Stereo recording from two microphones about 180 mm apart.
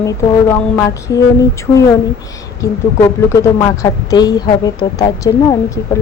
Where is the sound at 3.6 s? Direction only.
20° left (ahead or behind).